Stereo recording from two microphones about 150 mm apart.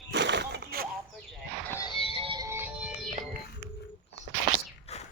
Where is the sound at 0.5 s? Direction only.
90° right.